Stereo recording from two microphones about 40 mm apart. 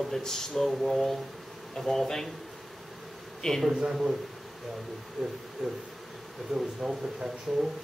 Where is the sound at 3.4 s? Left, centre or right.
Centre.